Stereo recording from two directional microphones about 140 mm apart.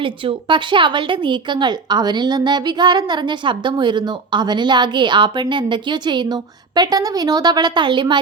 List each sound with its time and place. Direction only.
0.0 s a woman's voice: 35° right (ahead or behind)